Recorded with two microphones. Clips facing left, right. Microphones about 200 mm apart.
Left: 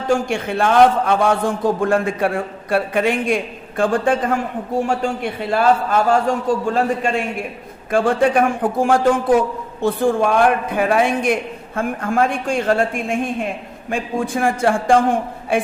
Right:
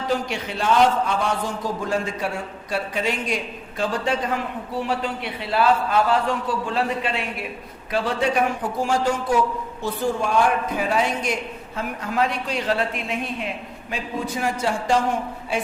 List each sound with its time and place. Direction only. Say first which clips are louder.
0.1 s a man's voice: left 8 dB; 50° left (ahead or behind)